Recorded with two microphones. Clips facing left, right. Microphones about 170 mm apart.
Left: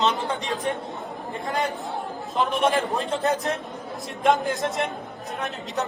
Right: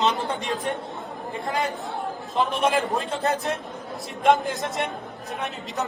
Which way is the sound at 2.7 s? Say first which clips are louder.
Even; centre (ahead or behind).